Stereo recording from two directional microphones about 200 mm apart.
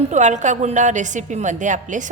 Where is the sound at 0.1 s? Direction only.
35° right (ahead or behind).